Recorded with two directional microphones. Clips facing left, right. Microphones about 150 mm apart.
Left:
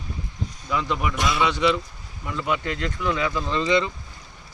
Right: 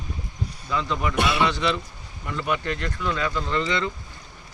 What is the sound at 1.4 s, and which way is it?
Speech, 15° left (ahead or behind).